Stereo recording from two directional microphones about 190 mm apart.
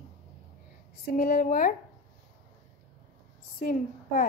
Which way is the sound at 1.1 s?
45° left (ahead or behind).